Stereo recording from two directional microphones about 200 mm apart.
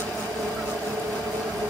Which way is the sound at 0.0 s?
5° left (ahead or behind).